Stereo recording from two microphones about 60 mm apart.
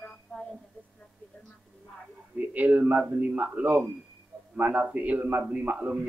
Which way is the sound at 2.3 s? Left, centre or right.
Right.